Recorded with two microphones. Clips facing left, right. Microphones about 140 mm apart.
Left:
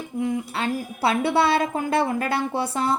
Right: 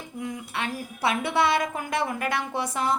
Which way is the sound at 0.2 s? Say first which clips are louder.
Left 7 dB; 30° left (ahead or behind).